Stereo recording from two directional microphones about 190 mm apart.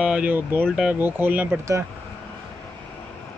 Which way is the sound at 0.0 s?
5° right (ahead or behind).